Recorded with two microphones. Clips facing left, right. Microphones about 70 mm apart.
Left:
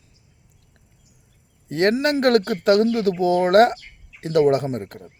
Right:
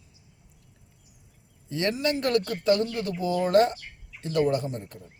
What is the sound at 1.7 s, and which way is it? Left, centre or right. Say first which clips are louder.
A man's voice: left 7 dB; left.